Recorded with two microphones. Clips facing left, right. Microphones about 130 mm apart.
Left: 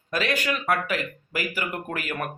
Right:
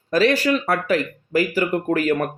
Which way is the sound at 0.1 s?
35° right (ahead or behind).